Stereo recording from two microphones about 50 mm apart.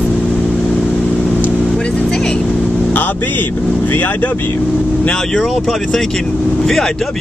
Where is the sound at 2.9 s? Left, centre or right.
Left.